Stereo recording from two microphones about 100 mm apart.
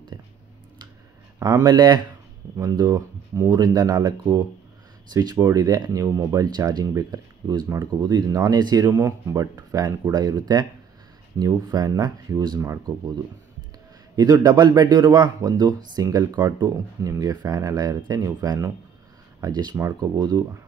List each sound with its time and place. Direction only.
1.4 s speech: 35° right (ahead or behind)
5.1 s speech: 40° right (ahead or behind)
14.1 s speech: 40° right (ahead or behind)
16.5 s speech: 30° right (ahead or behind)
19.4 s speech: 45° right (ahead or behind)